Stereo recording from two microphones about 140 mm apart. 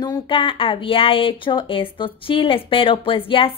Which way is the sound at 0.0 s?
35° left (ahead or behind).